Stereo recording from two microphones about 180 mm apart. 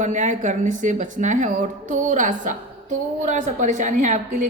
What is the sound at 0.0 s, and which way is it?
A woman's voice, 45° right (ahead or behind).